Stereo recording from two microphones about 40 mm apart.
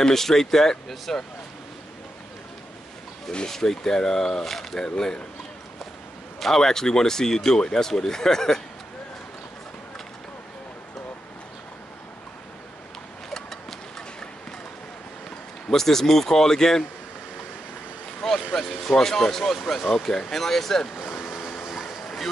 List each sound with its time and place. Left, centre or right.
0.0 s speech: centre
3.3 s speech: centre
6.4 s speech: centre
13.3 s vehicle: centre
15.2 s speech: centre
18.2 s vehicle: centre
18.9 s speech: centre
19.8 s speech: centre
20.1 s speech: centre
21.4 s a sound: centre